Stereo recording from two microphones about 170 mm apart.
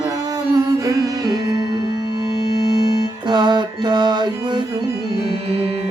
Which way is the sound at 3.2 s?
25° right (ahead or behind).